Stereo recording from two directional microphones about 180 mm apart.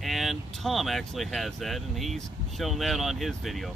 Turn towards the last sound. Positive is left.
turn(degrees=0)  # may be behind; listen again after turning